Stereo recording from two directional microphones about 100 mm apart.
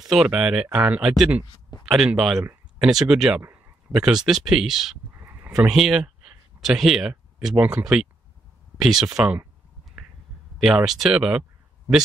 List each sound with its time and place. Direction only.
0.0 s speech: 5° right (ahead or behind)
5.1 s a sound: 20° right (ahead or behind)
5.5 s speech: 5° right (ahead or behind)
7.3 s speech: 15° right (ahead or behind)
8.8 s speech: 5° right (ahead or behind)
10.6 s speech: 5° right (ahead or behind)